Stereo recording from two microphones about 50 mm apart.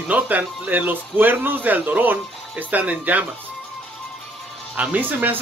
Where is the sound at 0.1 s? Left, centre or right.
Right.